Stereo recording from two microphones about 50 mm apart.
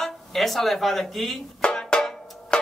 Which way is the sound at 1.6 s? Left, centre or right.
Centre.